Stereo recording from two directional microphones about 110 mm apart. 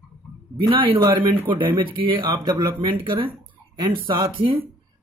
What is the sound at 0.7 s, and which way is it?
A man's voice, 50° right (ahead or behind).